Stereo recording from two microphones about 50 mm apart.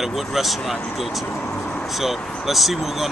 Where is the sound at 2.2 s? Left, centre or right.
Left.